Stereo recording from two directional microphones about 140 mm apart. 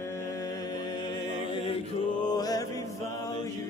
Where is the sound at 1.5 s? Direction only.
40° left (ahead or behind).